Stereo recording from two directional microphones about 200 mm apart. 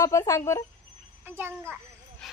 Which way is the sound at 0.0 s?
15° left (ahead or behind).